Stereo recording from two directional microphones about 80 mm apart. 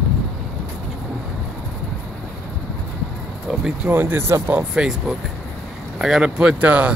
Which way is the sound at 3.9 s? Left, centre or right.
Right.